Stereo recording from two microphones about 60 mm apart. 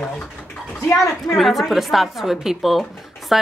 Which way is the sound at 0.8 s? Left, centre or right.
Left.